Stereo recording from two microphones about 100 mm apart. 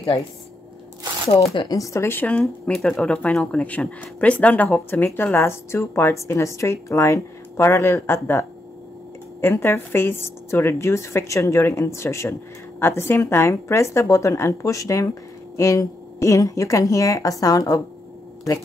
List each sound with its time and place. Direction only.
1.3 s speech: 50° left (ahead or behind)
1.8 s a woman's voice: 30° left (ahead or behind)